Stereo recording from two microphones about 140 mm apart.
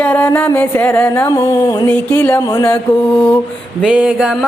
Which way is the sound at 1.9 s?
10° left (ahead or behind).